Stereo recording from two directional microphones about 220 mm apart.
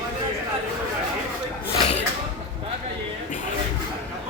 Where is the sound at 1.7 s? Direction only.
25° left (ahead or behind).